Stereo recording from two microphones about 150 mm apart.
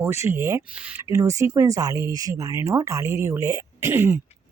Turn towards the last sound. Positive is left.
turn(degrees=-15)  # may be behind; listen again after turning